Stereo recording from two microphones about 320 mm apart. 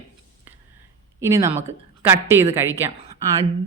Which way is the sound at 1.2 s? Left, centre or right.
Centre.